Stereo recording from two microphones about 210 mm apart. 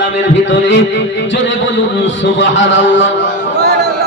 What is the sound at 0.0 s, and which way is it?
A man's voice, 60° left (ahead or behind).